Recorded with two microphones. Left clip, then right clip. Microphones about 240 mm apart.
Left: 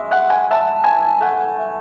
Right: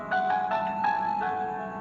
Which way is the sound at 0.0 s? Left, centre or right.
Left.